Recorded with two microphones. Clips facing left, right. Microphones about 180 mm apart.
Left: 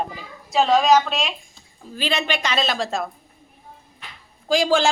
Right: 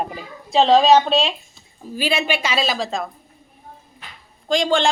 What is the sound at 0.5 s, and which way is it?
Speech, 25° right (ahead or behind).